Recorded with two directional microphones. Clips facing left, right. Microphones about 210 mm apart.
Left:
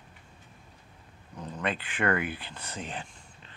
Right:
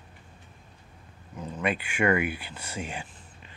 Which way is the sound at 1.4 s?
10° right (ahead or behind).